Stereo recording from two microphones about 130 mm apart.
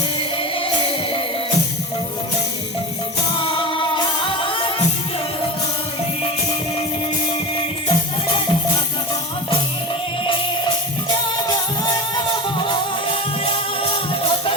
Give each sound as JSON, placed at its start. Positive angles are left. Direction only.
{"t": 0.2, "sound": "music", "side_deg": 45}
{"t": 3.3, "sound": "music", "side_deg": 40}
{"t": 12.6, "sound": "music", "side_deg": 45}